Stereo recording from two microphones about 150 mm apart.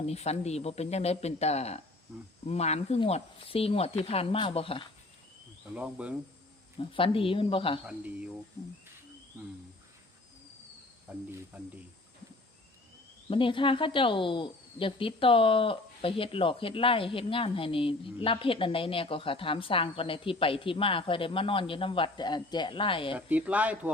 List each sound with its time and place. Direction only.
0.0 s speech: 45° left (ahead or behind)
5.7 s speech: 10° right (ahead or behind)
6.7 s speech: 35° left (ahead or behind)
7.9 s speech: 10° right (ahead or behind)
9.4 s speech: 20° right (ahead or behind)
11.1 s speech: 10° right (ahead or behind)
13.3 s speech: 35° left (ahead or behind)
23.1 s speech: 10° right (ahead or behind)